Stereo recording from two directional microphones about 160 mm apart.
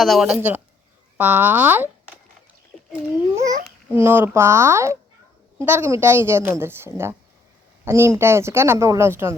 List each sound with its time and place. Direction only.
0.0 s a woman's voice: centre (ahead or behind)
3.4 s a woman's voice: 20° right (ahead or behind)